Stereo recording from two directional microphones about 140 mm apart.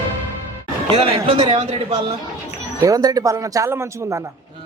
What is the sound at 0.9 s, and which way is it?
Speech, 40° right (ahead or behind).